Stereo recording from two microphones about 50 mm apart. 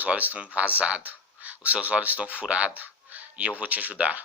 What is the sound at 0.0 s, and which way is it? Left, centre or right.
Speech, right.